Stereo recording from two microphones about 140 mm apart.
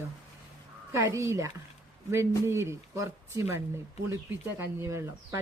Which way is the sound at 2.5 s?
20° right (ahead or behind).